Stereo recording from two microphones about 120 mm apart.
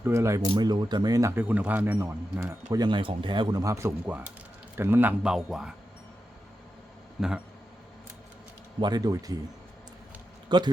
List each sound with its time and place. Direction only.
0.0 s a man's voice: 25° right (ahead or behind)
0.5 s speech: 35° right (ahead or behind)
1.4 s speech: 15° right (ahead or behind)
2.7 s speech: 40° right (ahead or behind)
3.6 s a man's voice: 25° right (ahead or behind)
5.2 s speech: 5° right (ahead or behind)
7.2 s speech: 5° right (ahead or behind)
8.8 s speech: 35° right (ahead or behind)
10.5 s speech: 40° right (ahead or behind)